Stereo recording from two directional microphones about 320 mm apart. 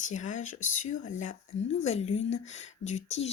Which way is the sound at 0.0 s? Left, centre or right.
Left.